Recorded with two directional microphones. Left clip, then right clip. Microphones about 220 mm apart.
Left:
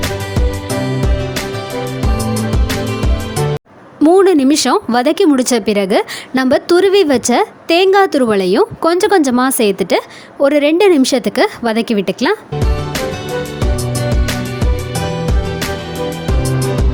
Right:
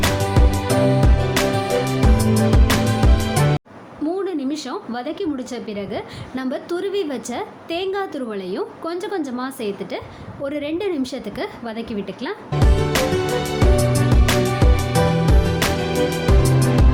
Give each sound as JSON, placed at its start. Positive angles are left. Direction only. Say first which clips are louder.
{"t": 2.1, "sound": "music", "louder": "left 1 dB", "side_deg": 0}
{"t": 4.0, "sound": "speech", "louder": "left 15 dB", "side_deg": 50}
{"t": 13.7, "sound": "music", "louder": "even", "side_deg": 0}
{"t": 16.4, "sound": "music", "louder": "left 1 dB", "side_deg": 0}